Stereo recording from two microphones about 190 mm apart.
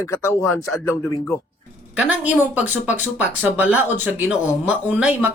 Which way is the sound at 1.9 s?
5° right (ahead or behind).